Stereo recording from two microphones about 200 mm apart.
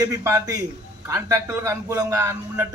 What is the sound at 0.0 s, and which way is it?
A man's voice, 15° right (ahead or behind).